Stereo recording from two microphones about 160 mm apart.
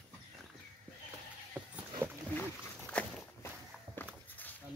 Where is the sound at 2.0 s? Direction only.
15° right (ahead or behind).